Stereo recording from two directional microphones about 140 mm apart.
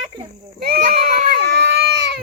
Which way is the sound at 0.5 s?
90° right.